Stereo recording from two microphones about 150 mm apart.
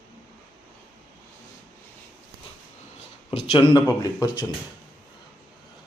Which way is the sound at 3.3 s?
45° left (ahead or behind).